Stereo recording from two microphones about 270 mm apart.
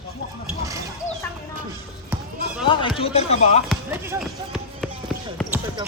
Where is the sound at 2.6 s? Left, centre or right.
Centre.